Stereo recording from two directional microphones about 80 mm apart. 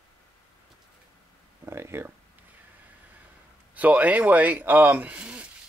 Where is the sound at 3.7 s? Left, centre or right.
Right.